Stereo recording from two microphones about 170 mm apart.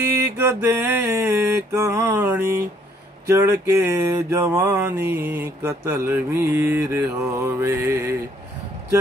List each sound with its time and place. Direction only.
0.0 s mantra: 15° right (ahead or behind)